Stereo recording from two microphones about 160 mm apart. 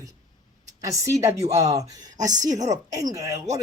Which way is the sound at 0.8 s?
20° right (ahead or behind).